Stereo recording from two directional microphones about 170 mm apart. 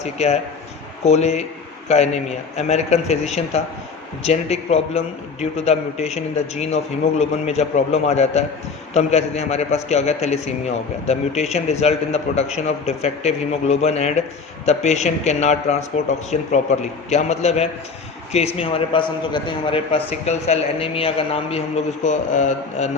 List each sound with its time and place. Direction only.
0.0 s a man's voice: 40° left (ahead or behind)
22.0 s a man's voice: 45° left (ahead or behind)